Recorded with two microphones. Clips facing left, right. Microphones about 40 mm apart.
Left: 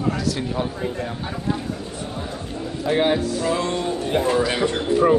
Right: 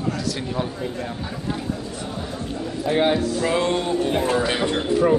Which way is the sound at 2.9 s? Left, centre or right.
Centre.